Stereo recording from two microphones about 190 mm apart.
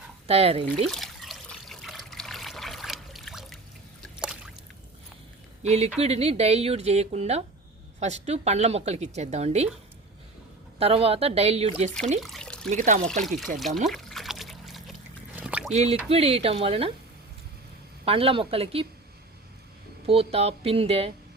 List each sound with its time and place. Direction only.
0.3 s a woman's voice: 30° right (ahead or behind)
0.9 s trickle: centre (ahead or behind)
4.2 s a sound: 5° right (ahead or behind)
5.6 s a woman's voice: 35° right (ahead or behind)
10.8 s a woman's voice: 30° right (ahead or behind)
12.2 s trickle: centre (ahead or behind)
12.7 s a woman's voice: 40° right (ahead or behind)
13.2 s speech: centre (ahead or behind)
13.8 s trickle: centre (ahead or behind)
15.4 s a sound: 5° right (ahead or behind)
15.7 s a woman's voice: 35° right (ahead or behind)
18.0 s a woman's voice: 30° right (ahead or behind)
20.1 s a woman's voice: 30° right (ahead or behind)